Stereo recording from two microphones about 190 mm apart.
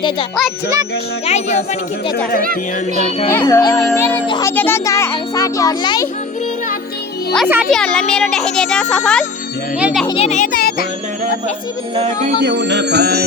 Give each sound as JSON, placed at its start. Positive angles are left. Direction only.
{"t": 1.2, "sound": "speech", "side_deg": 35}
{"t": 2.4, "sound": "speech", "side_deg": -50}
{"t": 3.2, "sound": "a child's voice", "side_deg": 15}
{"t": 7.3, "sound": "speech", "side_deg": -5}
{"t": 10.1, "sound": "speech", "side_deg": 35}
{"t": 11.9, "sound": "speech", "side_deg": -40}
{"t": 12.4, "sound": "music", "side_deg": -65}